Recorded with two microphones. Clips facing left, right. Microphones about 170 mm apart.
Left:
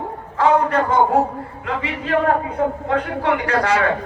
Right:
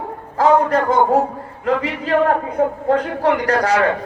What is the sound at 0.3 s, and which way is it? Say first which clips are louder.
A man's voice: right 2 dB; 40° right (ahead or behind).